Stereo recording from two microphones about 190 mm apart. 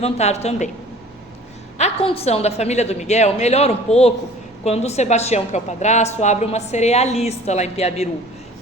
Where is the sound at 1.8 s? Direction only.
35° left (ahead or behind).